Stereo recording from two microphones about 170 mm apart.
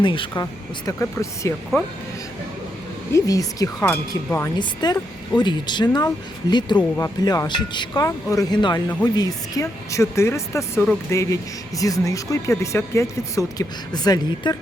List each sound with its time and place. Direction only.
0.0 s speech: 30° left (ahead or behind)
0.9 s speech: 15° left (ahead or behind)
3.1 s speech: 20° left (ahead or behind)
4.5 s speech: 25° left (ahead or behind)
6.7 s speech: 15° left (ahead or behind)
7.3 s speech: 25° left (ahead or behind)